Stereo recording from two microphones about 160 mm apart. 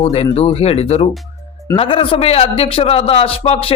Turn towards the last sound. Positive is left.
turn(degrees=35)  # may be behind; listen again after turning